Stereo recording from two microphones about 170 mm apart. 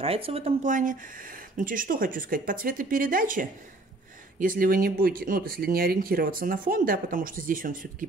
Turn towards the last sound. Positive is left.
turn(degrees=-55)  # may be behind; listen again after turning